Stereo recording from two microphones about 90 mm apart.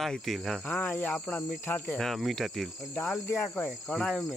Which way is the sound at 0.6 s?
15° left (ahead or behind).